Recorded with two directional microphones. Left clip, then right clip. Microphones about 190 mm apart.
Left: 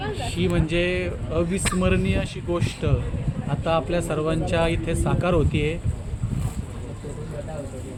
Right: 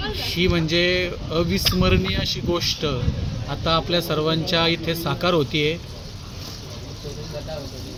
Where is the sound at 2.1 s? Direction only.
40° right (ahead or behind).